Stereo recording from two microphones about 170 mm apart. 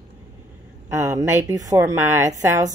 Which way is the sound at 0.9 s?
20° right (ahead or behind).